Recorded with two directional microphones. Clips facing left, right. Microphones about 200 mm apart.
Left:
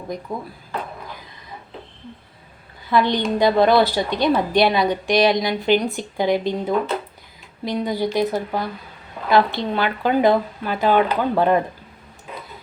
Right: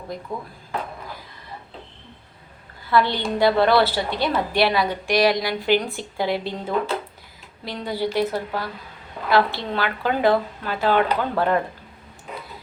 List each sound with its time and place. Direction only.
2.9 s a woman's voice: 15° left (ahead or behind)